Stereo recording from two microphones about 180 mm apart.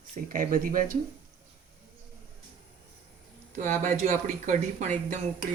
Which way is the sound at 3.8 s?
40° right (ahead or behind).